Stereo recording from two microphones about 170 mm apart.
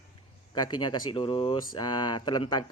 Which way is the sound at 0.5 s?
25° left (ahead or behind).